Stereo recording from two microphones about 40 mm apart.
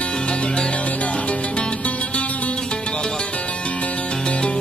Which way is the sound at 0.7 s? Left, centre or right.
Left.